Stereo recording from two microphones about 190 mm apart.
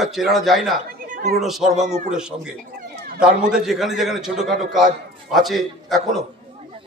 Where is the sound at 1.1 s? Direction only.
45° right (ahead or behind).